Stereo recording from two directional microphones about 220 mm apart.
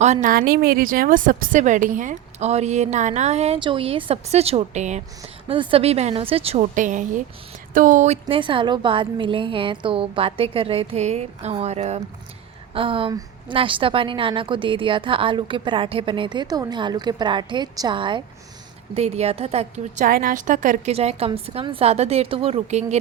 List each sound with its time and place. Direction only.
0.0 s a woman's voice: 35° right (ahead or behind)